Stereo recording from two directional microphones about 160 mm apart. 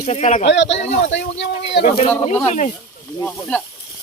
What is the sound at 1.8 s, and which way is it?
Speech, 40° left (ahead or behind).